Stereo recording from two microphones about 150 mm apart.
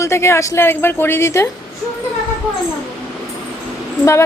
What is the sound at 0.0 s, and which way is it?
A woman's voice, 20° left (ahead or behind).